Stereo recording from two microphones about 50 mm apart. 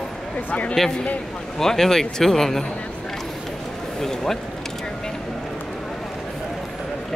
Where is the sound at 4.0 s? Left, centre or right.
Centre.